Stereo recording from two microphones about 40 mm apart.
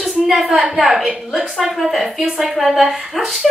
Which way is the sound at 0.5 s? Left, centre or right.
Centre.